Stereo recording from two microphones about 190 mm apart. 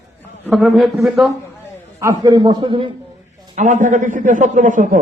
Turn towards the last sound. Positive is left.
turn(degrees=-45)  # may be behind; listen again after turning